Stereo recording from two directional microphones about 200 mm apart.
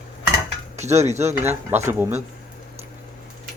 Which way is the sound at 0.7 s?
35° right (ahead or behind).